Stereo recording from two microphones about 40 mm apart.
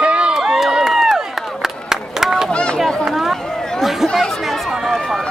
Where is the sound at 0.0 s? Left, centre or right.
Right.